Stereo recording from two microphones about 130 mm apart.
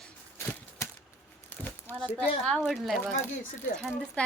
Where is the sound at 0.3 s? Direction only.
20° left (ahead or behind).